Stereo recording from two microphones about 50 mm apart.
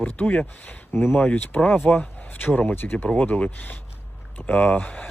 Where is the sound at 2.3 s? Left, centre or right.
Left.